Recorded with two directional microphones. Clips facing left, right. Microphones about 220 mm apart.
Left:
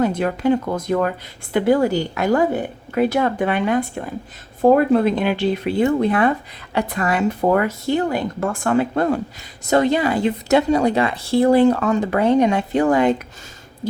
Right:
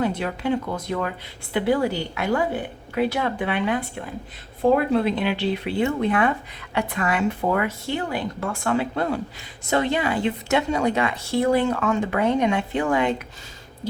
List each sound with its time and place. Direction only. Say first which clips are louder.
0.0 s a woman's voice: left 6 dB; 45° left (ahead or behind)